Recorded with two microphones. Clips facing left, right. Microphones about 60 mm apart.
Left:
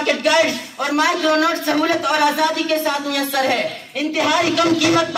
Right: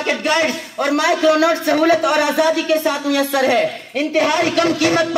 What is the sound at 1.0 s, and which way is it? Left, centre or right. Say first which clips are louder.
Speech: right 2 dB; centre.